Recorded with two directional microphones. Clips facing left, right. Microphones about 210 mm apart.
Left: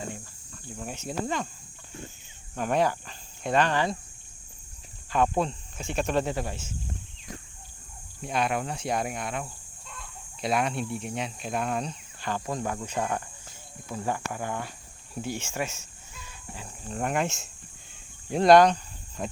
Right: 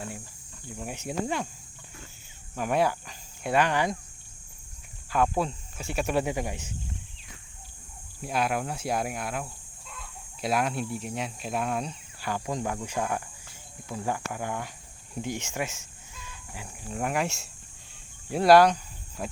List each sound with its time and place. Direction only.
0.8 s speech: 10° right (ahead or behind)
2.6 s speech: 10° right (ahead or behind)
5.1 s speech: 5° right (ahead or behind)
8.2 s speech: 5° right (ahead or behind)